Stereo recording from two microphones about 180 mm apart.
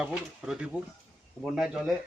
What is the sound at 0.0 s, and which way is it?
Speech, 5° right (ahead or behind).